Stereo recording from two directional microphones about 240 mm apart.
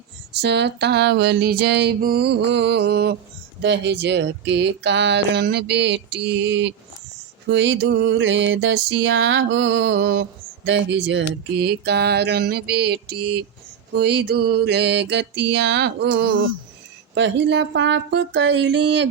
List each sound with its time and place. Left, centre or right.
0.3 s music: right